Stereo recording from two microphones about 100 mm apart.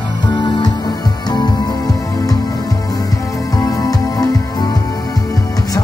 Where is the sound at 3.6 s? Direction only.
40° left (ahead or behind).